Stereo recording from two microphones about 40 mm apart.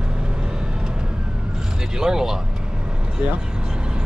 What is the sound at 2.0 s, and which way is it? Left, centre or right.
Speech, centre.